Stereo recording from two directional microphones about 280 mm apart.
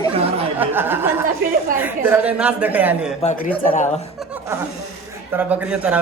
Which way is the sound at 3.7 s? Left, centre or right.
Left.